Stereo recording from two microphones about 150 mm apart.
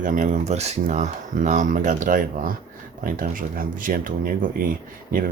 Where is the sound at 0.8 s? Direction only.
55° right (ahead or behind).